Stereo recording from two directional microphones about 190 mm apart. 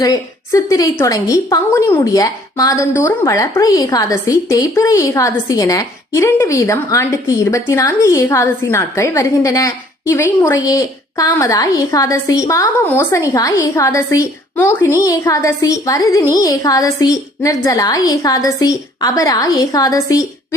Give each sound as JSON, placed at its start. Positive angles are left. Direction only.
{"t": 0.0, "sound": "a woman's voice", "side_deg": 20}